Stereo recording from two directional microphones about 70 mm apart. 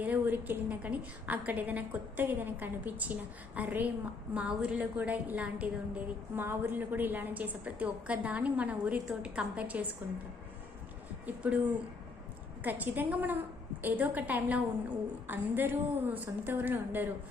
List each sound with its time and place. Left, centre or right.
0.0 s a woman's voice: right
6.3 s a woman's voice: right
11.3 s a woman's voice: right
12.6 s a woman's voice: right